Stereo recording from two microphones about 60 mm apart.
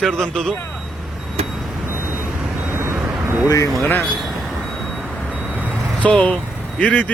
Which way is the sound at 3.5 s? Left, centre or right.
Left.